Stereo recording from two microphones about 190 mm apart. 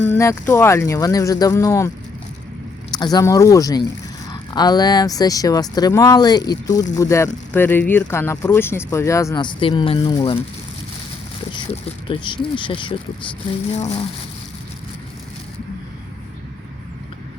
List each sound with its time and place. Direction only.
0.0 s speech: 15° left (ahead or behind)
2.9 s speech: 20° left (ahead or behind)
11.5 s speech: 25° left (ahead or behind)
13.7 s a sound: 35° left (ahead or behind)